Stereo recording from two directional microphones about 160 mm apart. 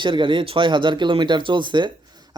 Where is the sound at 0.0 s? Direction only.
30° right (ahead or behind).